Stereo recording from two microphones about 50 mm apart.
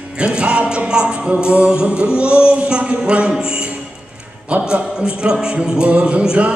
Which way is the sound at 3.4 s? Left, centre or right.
Centre.